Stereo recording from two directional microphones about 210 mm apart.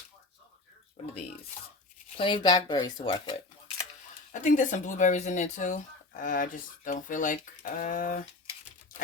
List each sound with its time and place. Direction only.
2.1 s speech: 25° left (ahead or behind)
4.3 s speech: 35° left (ahead or behind)